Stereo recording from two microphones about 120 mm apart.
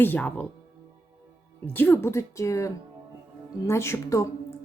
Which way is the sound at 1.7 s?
15° left (ahead or behind).